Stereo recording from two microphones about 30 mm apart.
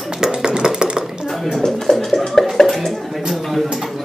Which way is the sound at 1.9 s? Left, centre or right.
Centre.